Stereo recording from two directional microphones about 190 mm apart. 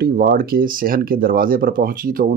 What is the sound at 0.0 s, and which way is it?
Speech, 55° right (ahead or behind).